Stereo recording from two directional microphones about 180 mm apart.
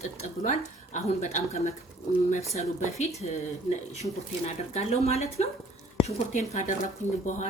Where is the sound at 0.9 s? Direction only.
40° left (ahead or behind).